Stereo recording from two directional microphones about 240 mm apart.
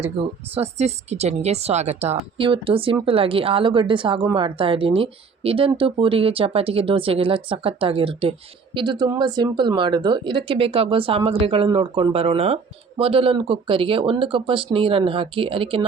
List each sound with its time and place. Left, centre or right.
0.5 s speech: right